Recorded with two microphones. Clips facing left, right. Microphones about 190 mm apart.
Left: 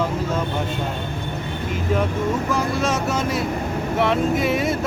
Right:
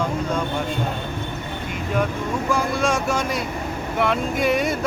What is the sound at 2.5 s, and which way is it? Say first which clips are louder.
Speech: even; centre (ahead or behind).